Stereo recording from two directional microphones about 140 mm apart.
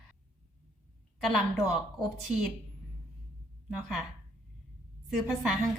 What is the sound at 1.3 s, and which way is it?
Speech, centre (ahead or behind).